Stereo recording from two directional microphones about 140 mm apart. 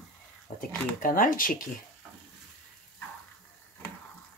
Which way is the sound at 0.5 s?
80° left.